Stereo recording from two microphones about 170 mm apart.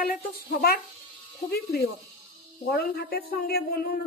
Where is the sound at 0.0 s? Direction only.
70° left (ahead or behind).